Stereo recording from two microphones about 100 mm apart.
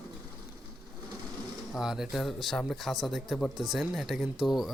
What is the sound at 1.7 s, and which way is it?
Speech, 5° right (ahead or behind).